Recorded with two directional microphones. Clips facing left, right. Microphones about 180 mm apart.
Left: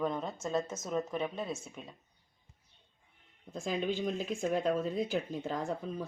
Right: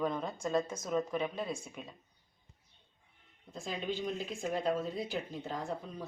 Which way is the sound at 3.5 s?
45° left (ahead or behind).